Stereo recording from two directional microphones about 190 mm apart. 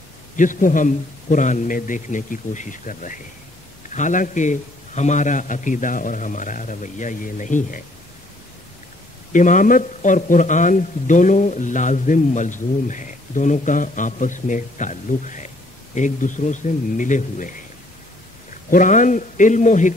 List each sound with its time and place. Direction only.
0.4 s a man's voice: 45° left (ahead or behind)
9.3 s a man's voice: 40° left (ahead or behind)
18.7 s a man's voice: 40° left (ahead or behind)